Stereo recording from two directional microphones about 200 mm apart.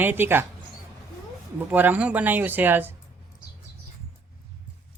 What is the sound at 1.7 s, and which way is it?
Speech, 10° right (ahead or behind).